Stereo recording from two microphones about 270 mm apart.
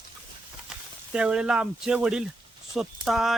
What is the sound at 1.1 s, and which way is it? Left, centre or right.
Speech, centre.